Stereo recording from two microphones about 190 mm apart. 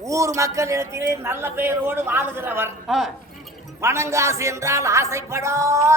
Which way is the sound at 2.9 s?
Centre (ahead or behind).